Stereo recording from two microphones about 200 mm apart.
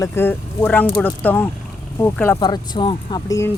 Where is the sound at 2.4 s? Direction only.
20° left (ahead or behind).